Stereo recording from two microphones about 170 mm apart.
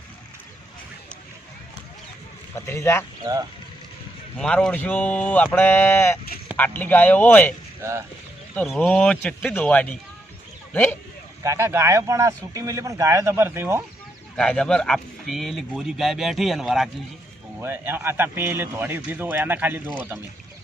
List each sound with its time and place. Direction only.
2.6 s speech: 15° left (ahead or behind)
4.4 s speech: 5° left (ahead or behind)
7.8 s speech: 15° right (ahead or behind)
8.6 s speech: centre (ahead or behind)
8.9 s speech: 10° left (ahead or behind)
11.4 s a man's voice: 15° right (ahead or behind)
14.3 s speech: 5° left (ahead or behind)
17.6 s a man's voice: 10° right (ahead or behind)